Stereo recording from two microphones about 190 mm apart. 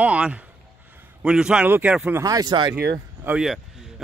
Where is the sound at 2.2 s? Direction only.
20° right (ahead or behind).